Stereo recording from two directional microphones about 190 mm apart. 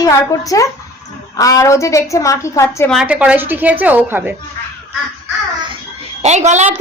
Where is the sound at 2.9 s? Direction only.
5° right (ahead or behind).